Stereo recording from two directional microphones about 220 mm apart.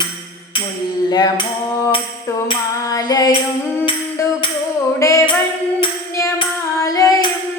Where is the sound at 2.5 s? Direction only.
15° left (ahead or behind).